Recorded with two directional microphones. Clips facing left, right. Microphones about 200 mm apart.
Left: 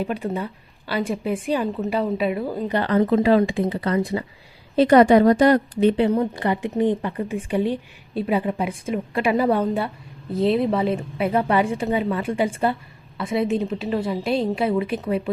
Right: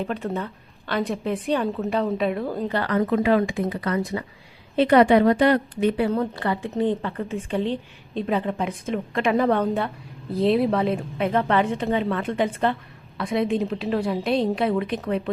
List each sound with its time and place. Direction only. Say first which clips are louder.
0.0 s a woman's voice: left 2 dB; 10° left (ahead or behind)
2.6 s speech: left 4 dB; 20° left (ahead or behind)
4.8 s a woman's voice: left 2 dB; 45° left (ahead or behind)
6.0 s a woman's voice: left 3 dB; 15° left (ahead or behind)